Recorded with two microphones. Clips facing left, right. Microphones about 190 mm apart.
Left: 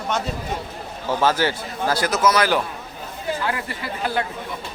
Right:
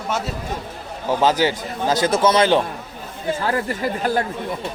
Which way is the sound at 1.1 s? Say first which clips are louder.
Right 2 dB; 15° right (ahead or behind).